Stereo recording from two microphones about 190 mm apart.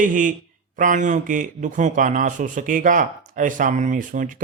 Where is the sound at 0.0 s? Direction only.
45° right (ahead or behind).